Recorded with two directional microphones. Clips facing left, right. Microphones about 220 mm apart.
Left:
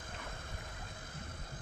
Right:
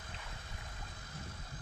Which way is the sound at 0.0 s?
50° left (ahead or behind).